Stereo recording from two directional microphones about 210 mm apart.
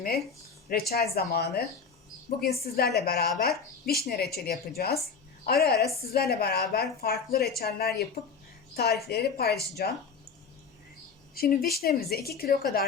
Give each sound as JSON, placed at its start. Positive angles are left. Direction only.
{"t": 0.7, "sound": "speech", "side_deg": 50}
{"t": 2.7, "sound": "speech", "side_deg": 50}
{"t": 11.3, "sound": "speech", "side_deg": 45}